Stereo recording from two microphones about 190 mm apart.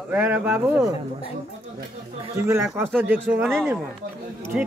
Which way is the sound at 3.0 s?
10° right (ahead or behind).